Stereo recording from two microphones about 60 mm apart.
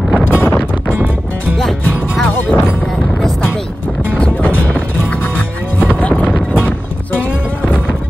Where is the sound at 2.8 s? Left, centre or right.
Centre.